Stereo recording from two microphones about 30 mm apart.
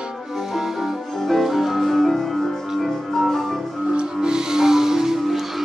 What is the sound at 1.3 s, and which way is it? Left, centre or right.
Music, centre.